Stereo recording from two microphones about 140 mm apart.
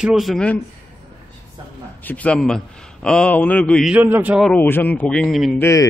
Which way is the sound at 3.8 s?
10° right (ahead or behind).